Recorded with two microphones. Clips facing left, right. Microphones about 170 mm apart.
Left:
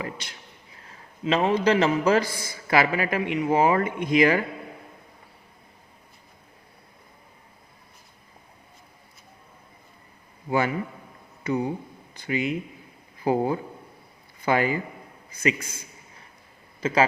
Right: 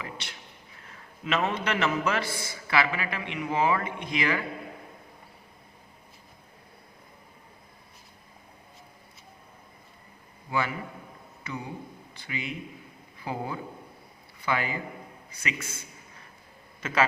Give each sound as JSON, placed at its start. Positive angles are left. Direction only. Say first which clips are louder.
{"t": 0.0, "sound": "speech", "louder": "left 6 dB", "side_deg": 40}
{"t": 0.9, "sound": "a man's voice", "louder": "left 6 dB", "side_deg": 30}
{"t": 11.5, "sound": "a man's voice", "louder": "left 11 dB", "side_deg": 45}
{"t": 16.8, "sound": "speech", "louder": "left 4 dB", "side_deg": 30}